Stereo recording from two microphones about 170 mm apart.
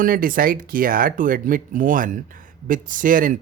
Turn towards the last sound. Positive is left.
turn(degrees=-55)  # may be behind; listen again after turning